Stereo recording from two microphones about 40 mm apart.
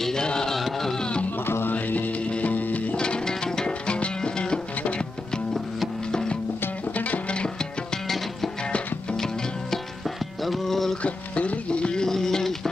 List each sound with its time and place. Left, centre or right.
0.0 s chant: centre
0.6 s music: centre
1.4 s music: left
1.7 s music: left
2.2 s music: left
2.5 s music: left
3.0 s music: centre
7.0 s music: left
7.3 s music: left
9.1 s music: centre
11.0 s a sound: left; by 12.5 s centre